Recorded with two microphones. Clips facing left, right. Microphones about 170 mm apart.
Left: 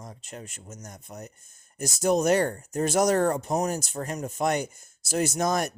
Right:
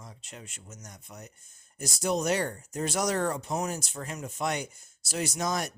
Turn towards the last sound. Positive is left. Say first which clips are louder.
# left 5 dB
turn(degrees=50)  # may be behind; listen again after turning